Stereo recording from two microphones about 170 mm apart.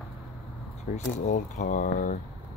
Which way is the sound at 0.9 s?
50° left (ahead or behind).